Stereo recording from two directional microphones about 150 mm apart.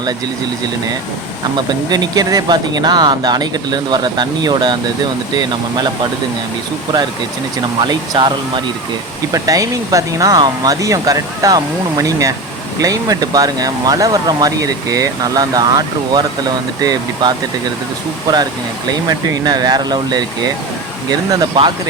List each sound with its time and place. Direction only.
1.9 s speech: 25° right (ahead or behind)
7.8 s speech: 30° right (ahead or behind)
19.0 s speech: 25° right (ahead or behind)